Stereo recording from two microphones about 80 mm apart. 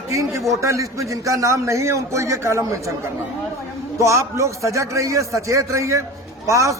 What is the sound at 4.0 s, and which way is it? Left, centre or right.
A man's voice, right.